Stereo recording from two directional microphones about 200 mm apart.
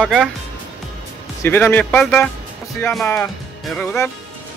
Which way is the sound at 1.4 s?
10° left (ahead or behind).